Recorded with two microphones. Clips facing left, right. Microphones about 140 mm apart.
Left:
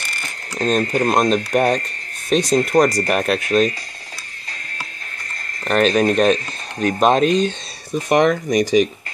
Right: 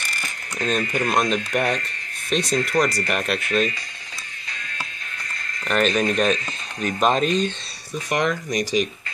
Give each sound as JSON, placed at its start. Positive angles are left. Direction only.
{"t": 0.6, "sound": "speech", "side_deg": 45}
{"t": 5.7, "sound": "speech", "side_deg": 35}
{"t": 8.1, "sound": "speech", "side_deg": 60}